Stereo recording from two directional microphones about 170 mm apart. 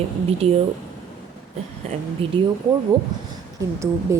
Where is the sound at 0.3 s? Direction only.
35° right (ahead or behind).